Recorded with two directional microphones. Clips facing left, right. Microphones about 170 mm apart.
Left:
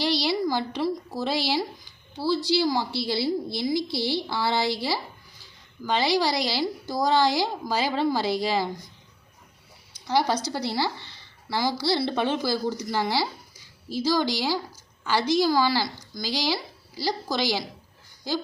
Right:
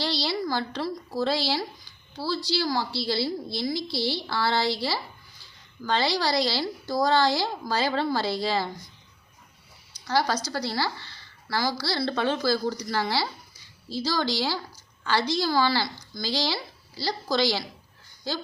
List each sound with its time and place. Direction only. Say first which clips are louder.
0.0 s a woman's voice: left 4 dB; 15° left (ahead or behind)
10.1 s a woman's voice: left 2 dB; 20° left (ahead or behind)